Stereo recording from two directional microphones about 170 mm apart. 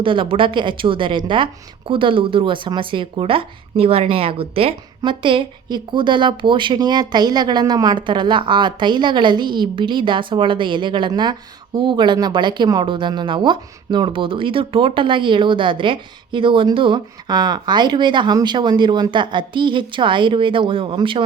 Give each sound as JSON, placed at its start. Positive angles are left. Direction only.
{"t": 0.0, "sound": "speech", "side_deg": -30}